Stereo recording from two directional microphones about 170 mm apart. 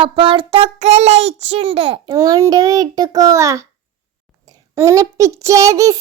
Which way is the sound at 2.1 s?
20° right (ahead or behind).